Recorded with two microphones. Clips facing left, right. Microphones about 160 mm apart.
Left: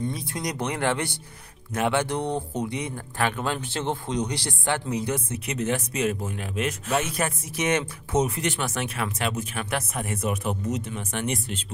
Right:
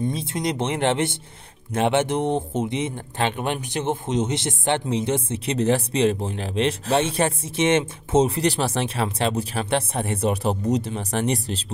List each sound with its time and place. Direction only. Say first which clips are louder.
0.0 s speech: right 5 dB; 25° right (ahead or behind)